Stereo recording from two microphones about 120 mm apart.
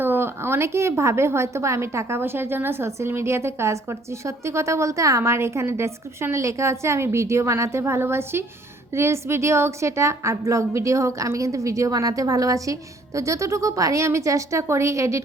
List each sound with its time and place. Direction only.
0.0 s a woman's voice: 20° right (ahead or behind)